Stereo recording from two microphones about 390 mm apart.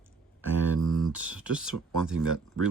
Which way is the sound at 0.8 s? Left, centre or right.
Centre.